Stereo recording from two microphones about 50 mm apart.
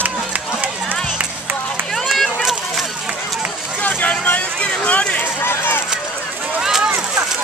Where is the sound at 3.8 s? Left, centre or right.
Left.